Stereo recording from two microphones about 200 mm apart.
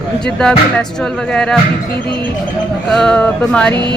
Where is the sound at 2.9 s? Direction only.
5° left (ahead or behind).